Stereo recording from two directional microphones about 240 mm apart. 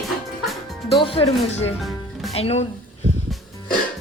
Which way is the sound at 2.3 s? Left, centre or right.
Left.